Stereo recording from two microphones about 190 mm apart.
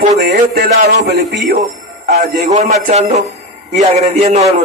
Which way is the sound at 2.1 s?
40° right (ahead or behind).